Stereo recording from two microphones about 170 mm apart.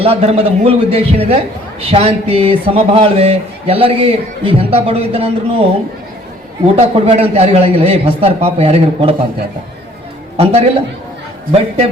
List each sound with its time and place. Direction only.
0.0 s a man's voice: 35° right (ahead or behind)
6.7 s a man's voice: 35° right (ahead or behind)
10.3 s a man's voice: 35° right (ahead or behind)